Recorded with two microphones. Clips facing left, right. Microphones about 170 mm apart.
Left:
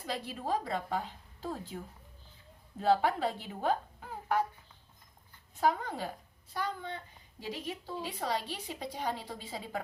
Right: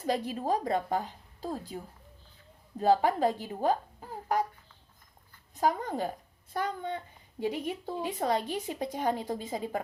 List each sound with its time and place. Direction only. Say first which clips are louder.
0.0 s a woman's voice: right 7 dB; 45° right (ahead or behind)
5.5 s a woman's voice: right 2 dB; 45° right (ahead or behind)